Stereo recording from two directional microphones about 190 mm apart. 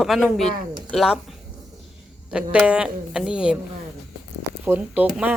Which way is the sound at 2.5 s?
5° right (ahead or behind).